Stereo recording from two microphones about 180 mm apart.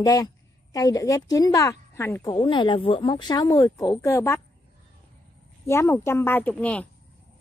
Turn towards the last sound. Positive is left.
turn(degrees=10)  # may be behind; listen again after turning